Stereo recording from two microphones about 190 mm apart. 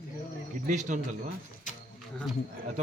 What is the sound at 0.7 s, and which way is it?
Speech, 40° right (ahead or behind).